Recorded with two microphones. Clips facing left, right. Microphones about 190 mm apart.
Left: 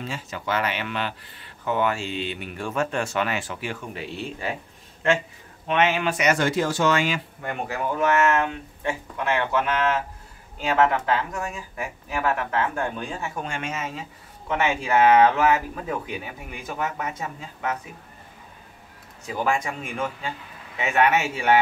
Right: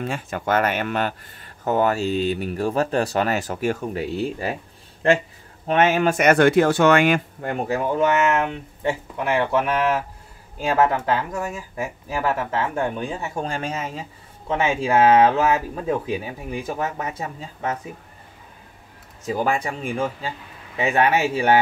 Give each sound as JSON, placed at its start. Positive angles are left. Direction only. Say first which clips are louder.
{"t": 0.0, "sound": "speech", "louder": "right 5 dB", "side_deg": -55}
{"t": 5.7, "sound": "speech", "louder": "right 4 dB", "side_deg": -45}
{"t": 7.4, "sound": "speech", "louder": "right 4 dB", "side_deg": -40}
{"t": 9.1, "sound": "speech", "louder": "right 2 dB", "side_deg": -15}
{"t": 11.1, "sound": "speech", "louder": "right 2 dB", "side_deg": -25}
{"t": 13.4, "sound": "speech", "louder": "right 5 dB", "side_deg": -35}
{"t": 19.2, "sound": "speech", "louder": "right 3 dB", "side_deg": -35}